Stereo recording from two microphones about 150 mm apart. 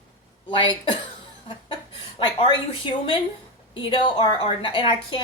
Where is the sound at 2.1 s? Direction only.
35° left (ahead or behind).